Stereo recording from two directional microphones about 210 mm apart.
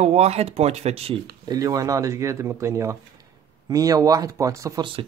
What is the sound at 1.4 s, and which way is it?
Speech, 15° right (ahead or behind).